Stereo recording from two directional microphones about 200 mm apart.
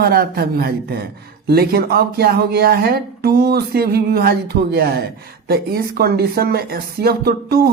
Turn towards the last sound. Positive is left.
turn(degrees=-50)  # may be behind; listen again after turning